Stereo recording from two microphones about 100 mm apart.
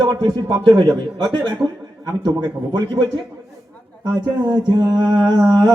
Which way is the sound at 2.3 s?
45° right (ahead or behind).